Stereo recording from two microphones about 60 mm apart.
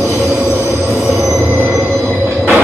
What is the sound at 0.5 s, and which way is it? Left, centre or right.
Train, right.